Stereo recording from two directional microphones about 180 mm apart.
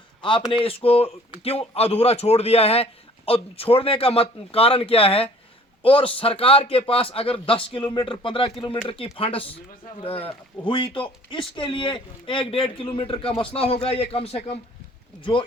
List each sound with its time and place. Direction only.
0.2 s speech: 30° left (ahead or behind)